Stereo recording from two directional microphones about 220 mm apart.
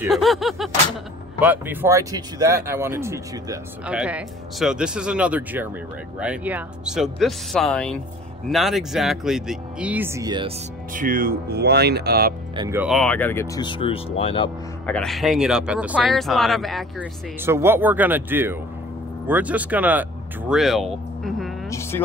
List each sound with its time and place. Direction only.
0.0 s speech: centre (ahead or behind); by 10.5 s 20° right (ahead or behind)
10.9 s speech: 40° right (ahead or behind)
12.5 s speech: 15° right (ahead or behind)
12.8 s speech: centre (ahead or behind); by 14.5 s 25° left (ahead or behind)
14.9 s speech: centre (ahead or behind)
17.4 s speech: 10° right (ahead or behind)
21.6 s a sound: 15° left (ahead or behind)